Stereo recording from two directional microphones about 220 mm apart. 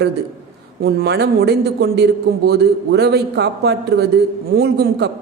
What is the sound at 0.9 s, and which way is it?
A man's voice, 50° right (ahead or behind).